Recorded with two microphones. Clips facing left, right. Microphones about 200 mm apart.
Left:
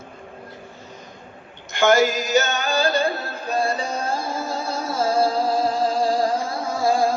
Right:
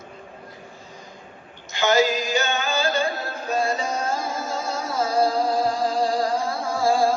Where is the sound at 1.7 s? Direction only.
50° left (ahead or behind); by 3.1 s 35° left (ahead or behind).